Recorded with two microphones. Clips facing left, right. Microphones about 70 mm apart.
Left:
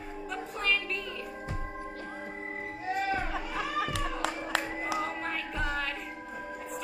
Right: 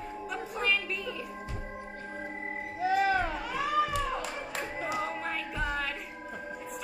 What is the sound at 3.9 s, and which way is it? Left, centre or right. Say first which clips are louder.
Music: right 1 dB; left.